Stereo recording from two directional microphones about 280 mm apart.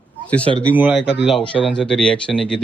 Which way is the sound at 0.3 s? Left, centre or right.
Centre.